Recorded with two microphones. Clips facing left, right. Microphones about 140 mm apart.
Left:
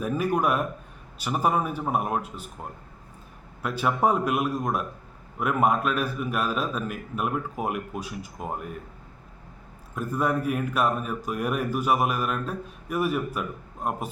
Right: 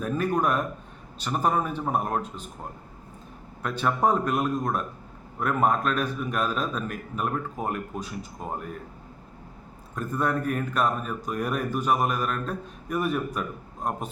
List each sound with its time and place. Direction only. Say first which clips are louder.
0.0 s speech: left 1 dB; 10° left (ahead or behind)
3.6 s speech: even; 5° left (ahead or behind)
9.9 s speech: left 1 dB; 10° left (ahead or behind)